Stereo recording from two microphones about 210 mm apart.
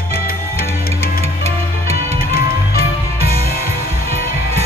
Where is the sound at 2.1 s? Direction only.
45° left (ahead or behind).